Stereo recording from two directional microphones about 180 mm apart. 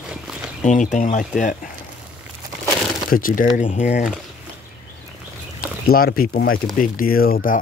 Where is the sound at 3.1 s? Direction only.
50° left (ahead or behind).